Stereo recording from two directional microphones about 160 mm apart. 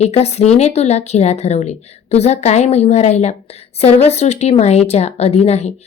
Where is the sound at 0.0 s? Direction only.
40° left (ahead or behind).